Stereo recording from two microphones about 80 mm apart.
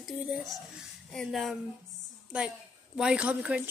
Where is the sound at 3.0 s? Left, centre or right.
Centre.